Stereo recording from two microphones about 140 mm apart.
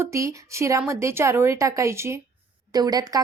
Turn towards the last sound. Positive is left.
turn(degrees=-25)  # may be behind; listen again after turning